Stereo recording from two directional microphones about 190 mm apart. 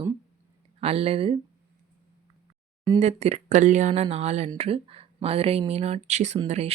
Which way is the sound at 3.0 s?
35° right (ahead or behind).